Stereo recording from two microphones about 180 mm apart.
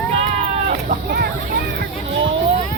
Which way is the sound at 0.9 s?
55° right (ahead or behind).